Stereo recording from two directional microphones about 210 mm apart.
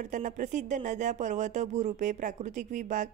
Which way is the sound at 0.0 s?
35° right (ahead or behind).